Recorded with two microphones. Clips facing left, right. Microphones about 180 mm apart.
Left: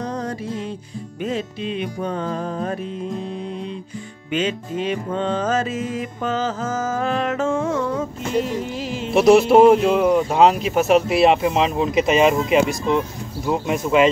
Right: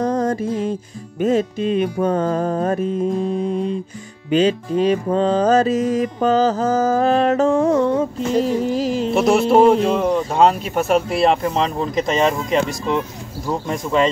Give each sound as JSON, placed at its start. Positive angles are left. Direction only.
{"t": 0.0, "sound": "music", "side_deg": -45}
{"t": 9.1, "sound": "speech", "side_deg": 0}